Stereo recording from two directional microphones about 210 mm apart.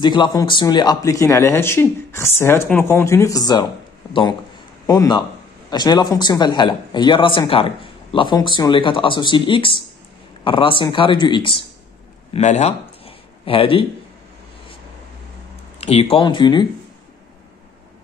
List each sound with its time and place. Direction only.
0.0 s speech: 20° left (ahead or behind)
4.8 s a man's voice: 20° left (ahead or behind)
15.8 s speech: 30° left (ahead or behind)